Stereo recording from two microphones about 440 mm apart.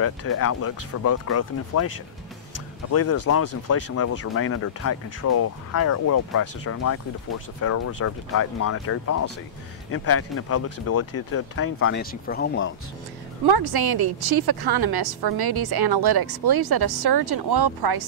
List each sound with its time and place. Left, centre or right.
0.0 s speech: left
13.5 s a woman's voice: right